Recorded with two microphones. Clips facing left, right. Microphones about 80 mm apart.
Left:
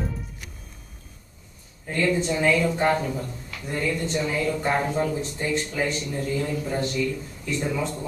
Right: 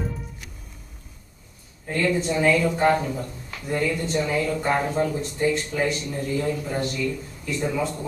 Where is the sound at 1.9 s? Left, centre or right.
Centre.